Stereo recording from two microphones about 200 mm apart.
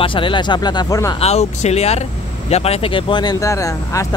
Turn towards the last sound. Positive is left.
turn(degrees=15)  # may be behind; listen again after turning